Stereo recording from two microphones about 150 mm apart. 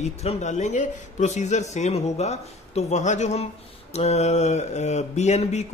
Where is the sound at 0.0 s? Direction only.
45° left (ahead or behind).